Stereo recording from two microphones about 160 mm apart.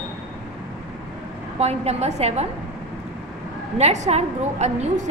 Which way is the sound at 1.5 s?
40° right (ahead or behind).